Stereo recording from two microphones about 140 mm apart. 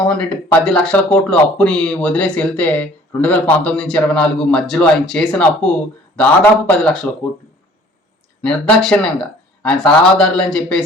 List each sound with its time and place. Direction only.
0.0 s speech: 5° left (ahead or behind)
8.4 s speech: 5° left (ahead or behind)